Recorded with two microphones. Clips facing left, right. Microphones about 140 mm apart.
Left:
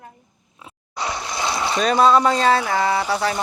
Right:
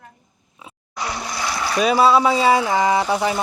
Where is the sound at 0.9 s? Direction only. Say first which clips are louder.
Left 1 dB; 20° left (ahead or behind).